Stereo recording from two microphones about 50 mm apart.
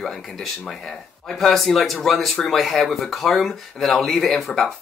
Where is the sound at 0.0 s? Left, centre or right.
Centre.